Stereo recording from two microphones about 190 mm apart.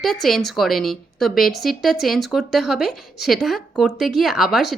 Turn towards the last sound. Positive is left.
turn(degrees=0)  # may be behind; listen again after turning